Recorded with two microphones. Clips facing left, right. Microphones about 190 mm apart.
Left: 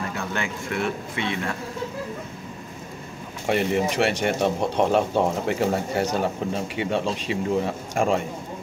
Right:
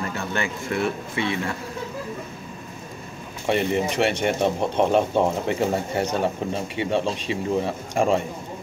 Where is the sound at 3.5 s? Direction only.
Centre (ahead or behind).